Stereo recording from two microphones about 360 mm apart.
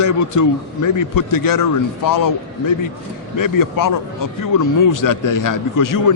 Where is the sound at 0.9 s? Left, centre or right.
Left.